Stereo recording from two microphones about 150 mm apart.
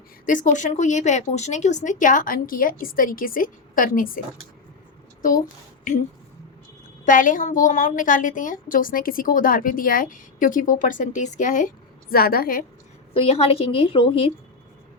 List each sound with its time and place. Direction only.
0.3 s a woman's voice: 60° left (ahead or behind)
7.0 s a woman's voice: 60° left (ahead or behind)
12.1 s a woman's voice: 80° left
13.1 s a woman's voice: 40° left (ahead or behind)